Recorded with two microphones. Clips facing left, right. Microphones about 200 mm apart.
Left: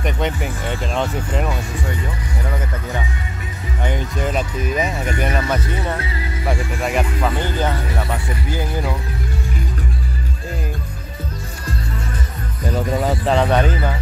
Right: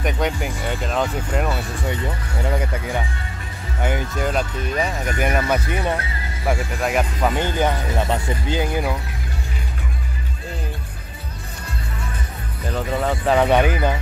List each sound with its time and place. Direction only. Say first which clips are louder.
0.0 s speech: even; centre (ahead or behind)
3.8 s speech: even; 5° right (ahead or behind)
5.2 s speech: right 2 dB; 10° right (ahead or behind)
7.2 s speech: right 1 dB; 15° right (ahead or behind)
12.7 s speech: left 2 dB; 5° left (ahead or behind); by 13.9 s 15° right (ahead or behind)